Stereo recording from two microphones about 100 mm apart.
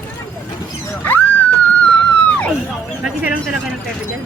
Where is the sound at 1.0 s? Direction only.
20° left (ahead or behind).